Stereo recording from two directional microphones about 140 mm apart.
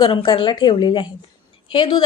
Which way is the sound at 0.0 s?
30° left (ahead or behind).